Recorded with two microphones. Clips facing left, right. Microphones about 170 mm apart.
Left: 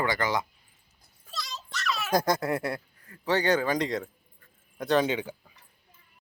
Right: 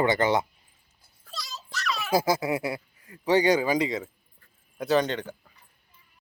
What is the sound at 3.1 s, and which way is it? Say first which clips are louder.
A man's voice: right 4 dB; 15° right (ahead or behind).